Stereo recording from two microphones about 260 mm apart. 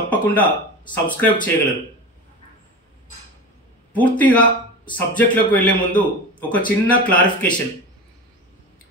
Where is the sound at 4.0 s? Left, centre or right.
Centre.